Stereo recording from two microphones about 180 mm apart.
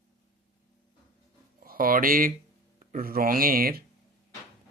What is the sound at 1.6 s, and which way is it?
Speech, 50° right (ahead or behind).